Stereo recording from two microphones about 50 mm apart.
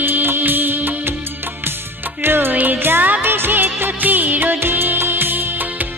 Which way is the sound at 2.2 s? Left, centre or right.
Right.